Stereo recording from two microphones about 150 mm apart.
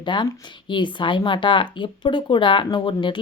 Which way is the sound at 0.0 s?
30° left (ahead or behind).